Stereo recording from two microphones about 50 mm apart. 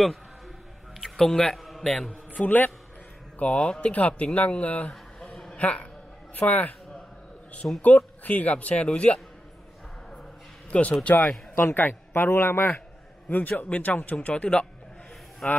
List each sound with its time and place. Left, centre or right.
1.0 s a man's voice: centre
2.3 s speech: left
3.3 s a man's voice: left
7.8 s a man's voice: left
10.7 s speech: left
11.5 s a man's voice: left
13.3 s a man's voice: left; by 15.6 s centre